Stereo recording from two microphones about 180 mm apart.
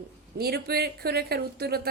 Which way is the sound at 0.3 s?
60° right (ahead or behind).